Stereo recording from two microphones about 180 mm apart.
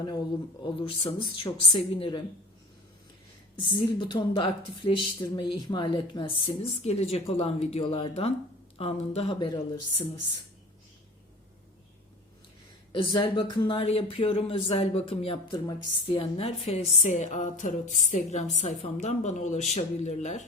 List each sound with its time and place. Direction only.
0.6 s speech: 30° left (ahead or behind)
3.5 s speech: 25° left (ahead or behind)
12.9 s speech: 25° left (ahead or behind)